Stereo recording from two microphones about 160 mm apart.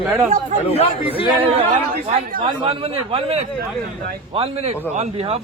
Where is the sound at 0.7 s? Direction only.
40° left (ahead or behind).